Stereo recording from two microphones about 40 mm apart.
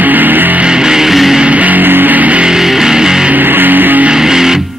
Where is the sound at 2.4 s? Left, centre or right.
Centre.